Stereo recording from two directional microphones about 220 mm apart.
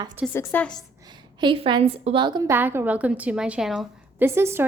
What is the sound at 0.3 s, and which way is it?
Speech, 5° left (ahead or behind).